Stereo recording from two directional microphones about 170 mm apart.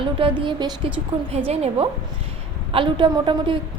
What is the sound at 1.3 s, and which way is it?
A woman's voice, 35° right (ahead or behind).